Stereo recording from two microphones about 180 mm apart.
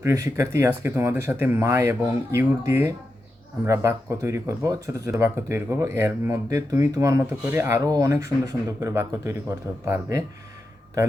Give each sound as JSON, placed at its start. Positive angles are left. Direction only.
{"t": 0.0, "sound": "speech", "side_deg": -15}